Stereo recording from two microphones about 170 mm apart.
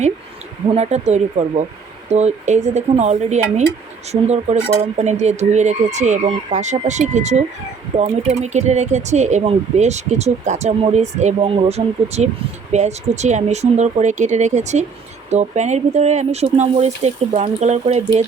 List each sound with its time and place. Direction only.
0.7 s speech: 40° right (ahead or behind)